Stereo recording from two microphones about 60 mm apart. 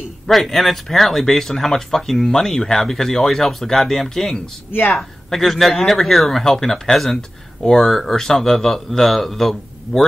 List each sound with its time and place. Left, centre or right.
0.3 s speech: centre
4.6 s speech: left
4.9 s speech: centre